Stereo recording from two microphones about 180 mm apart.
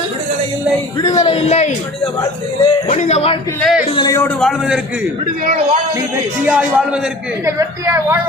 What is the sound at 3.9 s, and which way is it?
Speech, 25° left (ahead or behind).